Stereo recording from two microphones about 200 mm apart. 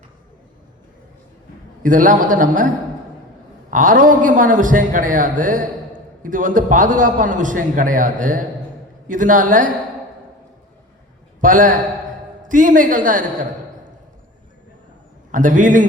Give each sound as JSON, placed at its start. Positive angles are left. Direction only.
{"t": 1.8, "sound": "a man's voice", "side_deg": -40}
{"t": 3.7, "sound": "a man's voice", "side_deg": -40}
{"t": 11.3, "sound": "a man's voice", "side_deg": -40}
{"t": 15.3, "sound": "a man's voice", "side_deg": -40}